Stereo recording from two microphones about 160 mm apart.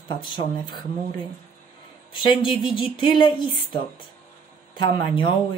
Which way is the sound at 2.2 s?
30° left (ahead or behind).